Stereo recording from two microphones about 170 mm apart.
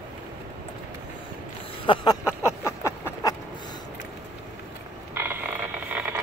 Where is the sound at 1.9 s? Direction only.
30° left (ahead or behind).